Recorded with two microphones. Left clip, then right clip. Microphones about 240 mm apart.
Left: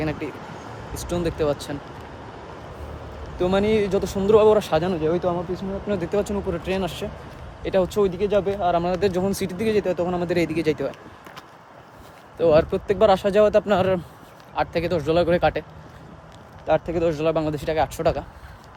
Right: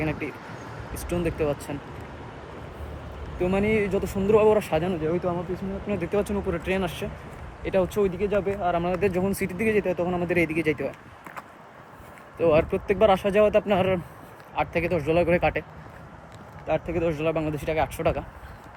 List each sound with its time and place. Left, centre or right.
0.0 s a sound: centre
1.1 s speech: centre
3.4 s speech: left
12.4 s speech: centre
16.6 s speech: centre